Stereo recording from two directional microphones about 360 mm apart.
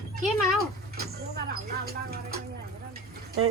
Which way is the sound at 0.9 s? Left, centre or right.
Right.